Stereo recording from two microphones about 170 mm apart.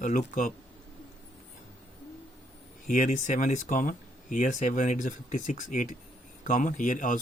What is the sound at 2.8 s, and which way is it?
Speech, 50° left (ahead or behind).